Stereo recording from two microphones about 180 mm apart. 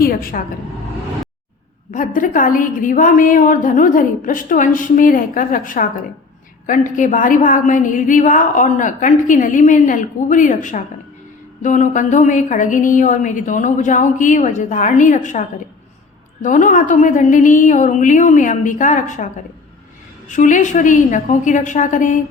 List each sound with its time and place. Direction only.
0.0 s a woman's voice: 55° left (ahead or behind)
1.9 s a woman's voice: 45° left (ahead or behind)